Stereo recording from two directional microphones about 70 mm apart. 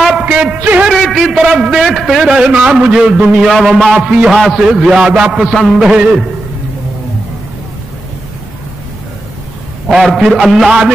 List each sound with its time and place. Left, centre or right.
0.2 s a sound: centre
0.6 s a man's voice: right
0.8 s a sound: centre
1.3 s a man's voice: centre
4.4 s a man's voice: centre
4.6 s a man's voice: centre
9.8 s a man's voice: centre